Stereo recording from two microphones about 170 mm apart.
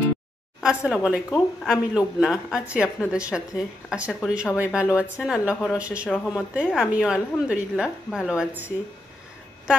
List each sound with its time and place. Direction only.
0.6 s a woman's voice: 5° right (ahead or behind)